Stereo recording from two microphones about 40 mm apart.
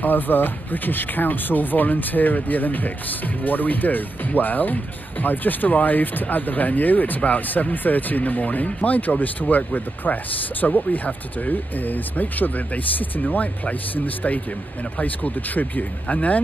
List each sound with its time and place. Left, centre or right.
0.0 s speech: left